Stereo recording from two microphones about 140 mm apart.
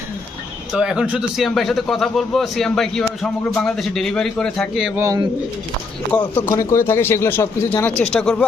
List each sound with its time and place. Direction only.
0.7 s a man's voice: 5° right (ahead or behind)
4.9 s speech: 20° right (ahead or behind)
6.1 s speech: 10° left (ahead or behind)